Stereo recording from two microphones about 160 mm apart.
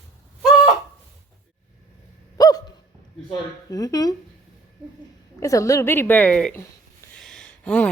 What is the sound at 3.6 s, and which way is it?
Speech, 25° left (ahead or behind).